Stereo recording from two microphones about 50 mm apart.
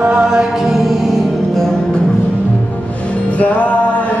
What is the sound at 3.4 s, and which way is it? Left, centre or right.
Music, left.